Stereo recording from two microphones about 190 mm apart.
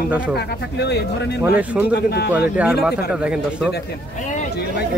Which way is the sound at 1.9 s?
60° left (ahead or behind).